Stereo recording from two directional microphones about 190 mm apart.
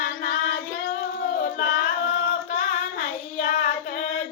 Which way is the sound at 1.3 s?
50° left (ahead or behind).